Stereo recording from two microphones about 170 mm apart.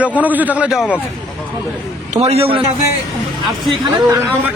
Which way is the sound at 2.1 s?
40° right (ahead or behind).